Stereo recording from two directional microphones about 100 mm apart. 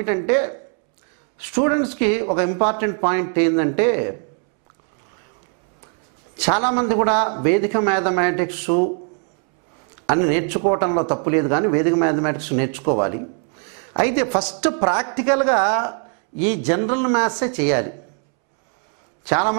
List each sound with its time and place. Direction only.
0.0 s a man's voice: 15° right (ahead or behind)
6.4 s a man's voice: 15° right (ahead or behind)
10.0 s a man's voice: 15° right (ahead or behind)
19.2 s a man's voice: 15° right (ahead or behind)